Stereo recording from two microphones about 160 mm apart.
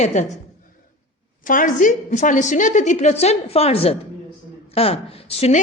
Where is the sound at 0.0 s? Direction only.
45° left (ahead or behind).